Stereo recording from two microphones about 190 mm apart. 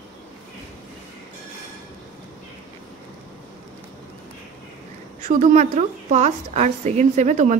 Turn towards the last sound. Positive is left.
turn(degrees=-40)  # may be behind; listen again after turning